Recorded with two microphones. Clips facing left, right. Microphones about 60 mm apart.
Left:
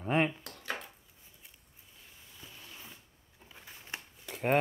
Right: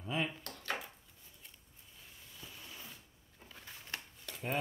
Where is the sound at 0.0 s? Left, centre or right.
Left.